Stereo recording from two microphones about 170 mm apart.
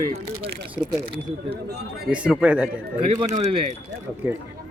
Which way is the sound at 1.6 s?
75° right (ahead or behind).